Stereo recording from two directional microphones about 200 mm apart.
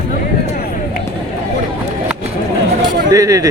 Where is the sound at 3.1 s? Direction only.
15° right (ahead or behind).